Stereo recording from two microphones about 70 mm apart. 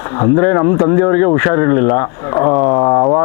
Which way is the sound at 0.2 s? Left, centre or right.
Left.